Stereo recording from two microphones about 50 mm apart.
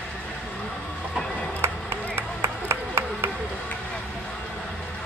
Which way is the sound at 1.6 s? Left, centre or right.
Right.